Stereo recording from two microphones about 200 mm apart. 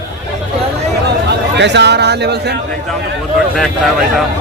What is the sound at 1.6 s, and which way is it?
Speech, 60° right (ahead or behind).